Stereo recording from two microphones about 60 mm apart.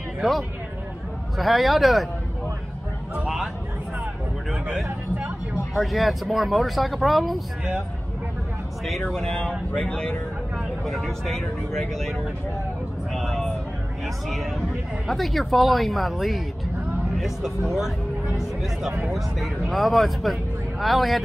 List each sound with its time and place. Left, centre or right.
0.2 s speech: centre
5.5 s speech: centre
9.1 s speech: centre
10.9 s speech: centre
13.1 s a sound: centre
14.0 s speech: centre